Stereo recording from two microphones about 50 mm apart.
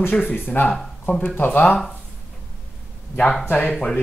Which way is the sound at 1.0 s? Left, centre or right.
Left.